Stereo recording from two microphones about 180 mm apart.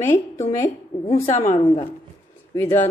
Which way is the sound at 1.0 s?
40° left (ahead or behind).